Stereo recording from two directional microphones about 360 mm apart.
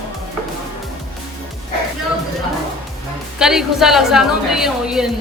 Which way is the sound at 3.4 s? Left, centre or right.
Centre.